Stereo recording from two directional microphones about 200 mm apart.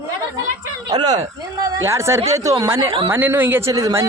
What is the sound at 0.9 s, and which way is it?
A man's voice, 20° right (ahead or behind).